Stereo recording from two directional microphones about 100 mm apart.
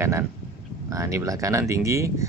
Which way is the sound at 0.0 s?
25° right (ahead or behind).